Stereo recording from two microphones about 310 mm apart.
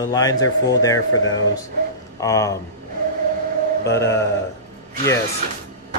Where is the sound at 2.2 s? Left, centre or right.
Centre.